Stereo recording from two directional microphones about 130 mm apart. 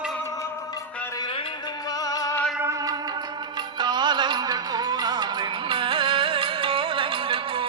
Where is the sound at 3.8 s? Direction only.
35° right (ahead or behind).